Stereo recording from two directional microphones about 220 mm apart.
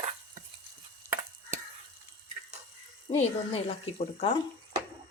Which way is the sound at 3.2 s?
30° left (ahead or behind).